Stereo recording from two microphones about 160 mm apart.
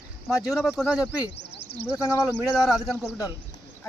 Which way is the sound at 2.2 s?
5° right (ahead or behind).